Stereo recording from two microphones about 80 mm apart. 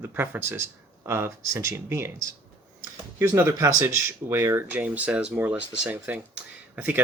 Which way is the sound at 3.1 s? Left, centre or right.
Right.